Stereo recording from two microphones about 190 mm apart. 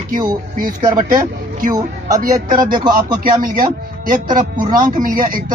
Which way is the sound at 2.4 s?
45° right (ahead or behind).